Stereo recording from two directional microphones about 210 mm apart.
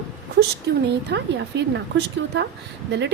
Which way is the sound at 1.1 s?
55° right (ahead or behind).